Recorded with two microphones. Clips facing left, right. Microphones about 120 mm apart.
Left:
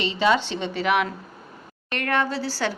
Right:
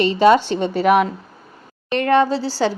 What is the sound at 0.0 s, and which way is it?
A woman's voice, 45° right (ahead or behind).